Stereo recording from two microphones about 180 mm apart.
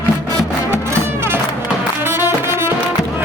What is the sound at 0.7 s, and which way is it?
Music, 15° right (ahead or behind).